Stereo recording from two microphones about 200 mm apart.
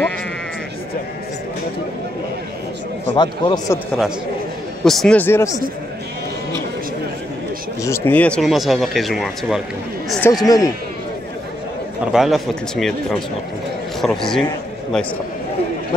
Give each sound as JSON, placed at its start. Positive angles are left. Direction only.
{"t": 3.2, "sound": "a man's voice", "side_deg": 20}
{"t": 4.8, "sound": "a man's voice", "side_deg": 5}
{"t": 7.8, "sound": "speech", "side_deg": 10}
{"t": 10.3, "sound": "a man's voice", "side_deg": 20}
{"t": 12.1, "sound": "speech", "side_deg": 0}
{"t": 14.0, "sound": "speech", "side_deg": 0}